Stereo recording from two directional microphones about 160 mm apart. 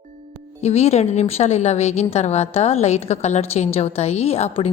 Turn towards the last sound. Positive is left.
turn(degrees=40)  # may be behind; listen again after turning